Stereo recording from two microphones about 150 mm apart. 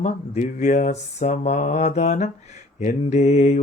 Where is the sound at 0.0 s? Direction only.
55° left (ahead or behind).